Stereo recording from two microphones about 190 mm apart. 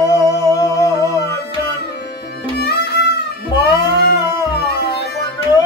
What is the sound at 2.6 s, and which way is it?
Music, 55° left (ahead or behind).